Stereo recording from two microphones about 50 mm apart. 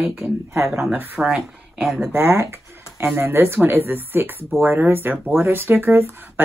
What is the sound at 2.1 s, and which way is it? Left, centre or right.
Speech, right.